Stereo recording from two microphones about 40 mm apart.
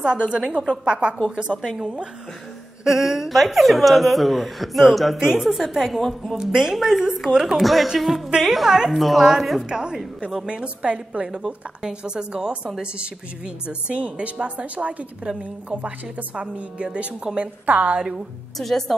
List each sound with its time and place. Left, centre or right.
0.0 s a woman's voice: right
2.8 s speech: centre
5.2 s speech: centre
5.8 s speech: centre
6.3 s speech: centre
7.6 s a woman's voice: centre
8.6 s speech: centre
8.9 s speech: centre
9.7 s a woman's voice: centre
11.2 s speech: centre
12.8 s a woman's voice: right
17.4 s a woman's voice: right
17.9 s a woman's voice: right
18.6 s speech: centre